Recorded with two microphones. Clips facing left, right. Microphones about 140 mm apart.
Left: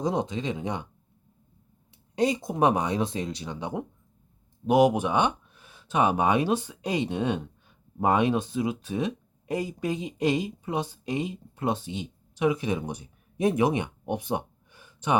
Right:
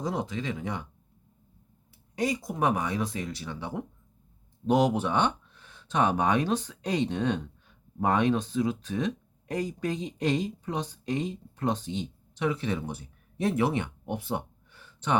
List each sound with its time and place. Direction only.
0.0 s speech: 20° left (ahead or behind)
2.1 s speech: 25° left (ahead or behind)